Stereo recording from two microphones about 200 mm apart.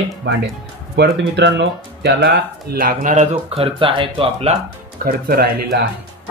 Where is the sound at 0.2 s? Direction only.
60° right (ahead or behind); by 4.6 s 30° right (ahead or behind).